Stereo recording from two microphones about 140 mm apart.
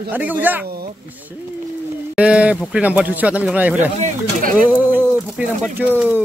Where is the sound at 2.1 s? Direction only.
10° right (ahead or behind).